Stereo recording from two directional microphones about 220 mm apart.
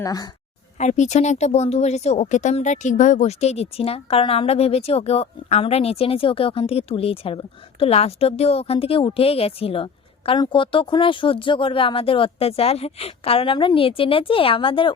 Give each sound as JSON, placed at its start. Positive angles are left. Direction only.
{"t": 0.0, "sound": "speech", "side_deg": 15}
{"t": 0.8, "sound": "speech", "side_deg": 30}